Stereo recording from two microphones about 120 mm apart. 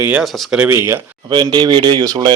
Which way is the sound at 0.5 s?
15° right (ahead or behind).